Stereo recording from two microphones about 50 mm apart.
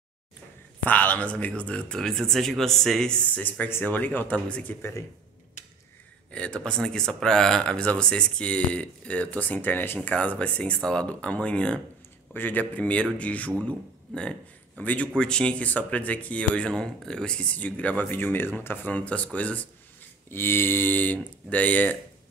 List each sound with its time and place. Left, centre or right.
0.8 s speech: left
2.0 s speech: centre
3.3 s speech: left
4.5 s speech: left
6.3 s speech: left
10.0 s speech: left
12.4 s a man's voice: left
14.8 s speech: left
15.1 s speech: centre
20.2 s speech: left